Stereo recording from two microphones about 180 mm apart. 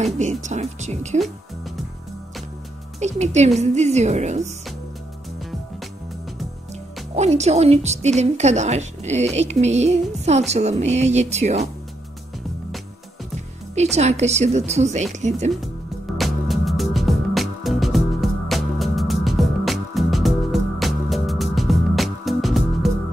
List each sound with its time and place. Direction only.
0.0 s a woman's voice: 40° right (ahead or behind)
3.0 s a woman's voice: 40° right (ahead or behind)
7.2 s a woman's voice: 40° right (ahead or behind)
13.7 s a woman's voice: 40° right (ahead or behind)
16.2 s music: centre (ahead or behind)